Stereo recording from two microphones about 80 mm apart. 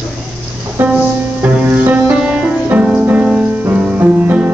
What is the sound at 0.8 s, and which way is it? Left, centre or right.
Music, right.